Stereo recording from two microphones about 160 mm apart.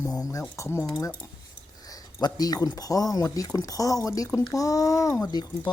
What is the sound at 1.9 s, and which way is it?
Speech, 25° left (ahead or behind).